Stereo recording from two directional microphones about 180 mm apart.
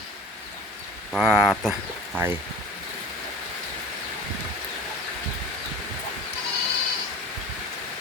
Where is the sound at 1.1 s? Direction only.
Centre (ahead or behind).